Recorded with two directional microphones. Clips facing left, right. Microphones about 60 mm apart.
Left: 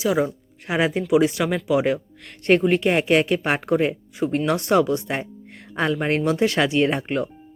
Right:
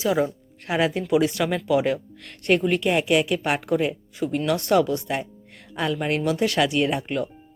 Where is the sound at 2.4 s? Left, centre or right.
Left.